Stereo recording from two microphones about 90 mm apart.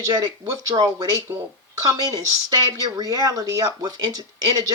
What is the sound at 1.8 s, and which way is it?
Speech, 40° right (ahead or behind).